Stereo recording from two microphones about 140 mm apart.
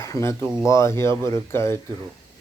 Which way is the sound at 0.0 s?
20° left (ahead or behind).